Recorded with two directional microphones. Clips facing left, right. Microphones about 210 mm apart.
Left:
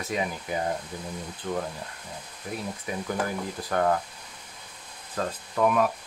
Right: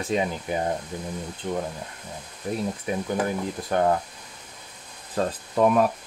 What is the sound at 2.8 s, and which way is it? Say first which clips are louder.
Speech: right 1 dB; 25° right (ahead or behind).